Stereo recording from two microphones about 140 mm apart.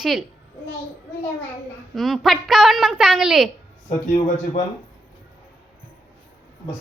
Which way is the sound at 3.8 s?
60° left (ahead or behind).